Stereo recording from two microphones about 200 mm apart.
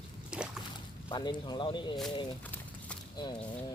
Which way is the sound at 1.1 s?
20° left (ahead or behind).